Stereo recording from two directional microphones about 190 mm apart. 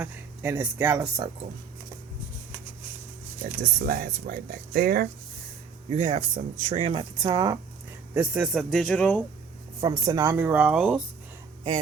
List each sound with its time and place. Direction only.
0.0 s speech: 10° right (ahead or behind)
3.6 s speech: 50° right (ahead or behind)
5.9 s speech: 35° right (ahead or behind)
8.1 s speech: 10° right (ahead or behind)
9.8 s speech: 20° right (ahead or behind); by 11.0 s 5° right (ahead or behind)